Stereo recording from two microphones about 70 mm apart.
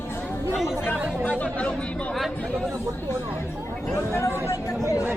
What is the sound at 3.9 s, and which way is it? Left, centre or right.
Speech, left.